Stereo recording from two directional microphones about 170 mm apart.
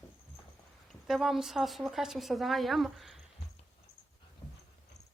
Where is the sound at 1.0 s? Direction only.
Centre (ahead or behind).